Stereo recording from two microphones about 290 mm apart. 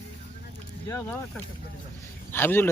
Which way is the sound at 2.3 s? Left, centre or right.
Centre.